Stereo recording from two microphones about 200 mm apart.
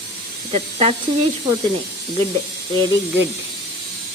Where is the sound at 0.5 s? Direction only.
30° right (ahead or behind).